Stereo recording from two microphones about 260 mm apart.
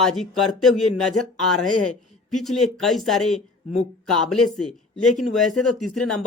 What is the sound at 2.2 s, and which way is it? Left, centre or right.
Speech, centre.